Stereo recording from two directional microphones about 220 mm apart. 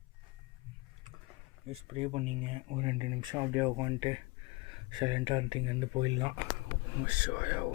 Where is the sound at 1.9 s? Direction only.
25° right (ahead or behind).